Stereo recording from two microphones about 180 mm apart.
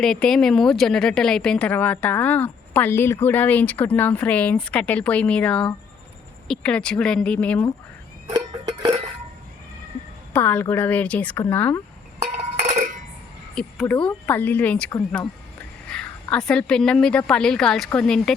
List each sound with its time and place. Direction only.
0.0 s a woman's voice: 5° left (ahead or behind)
10.3 s speech: 10° left (ahead or behind)
12.4 s a sound: 40° right (ahead or behind)
13.6 s speech: 5° left (ahead or behind)
15.9 s a woman's voice: 5° left (ahead or behind)